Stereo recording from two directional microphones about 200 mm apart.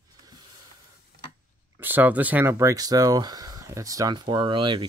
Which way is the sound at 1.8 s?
10° right (ahead or behind).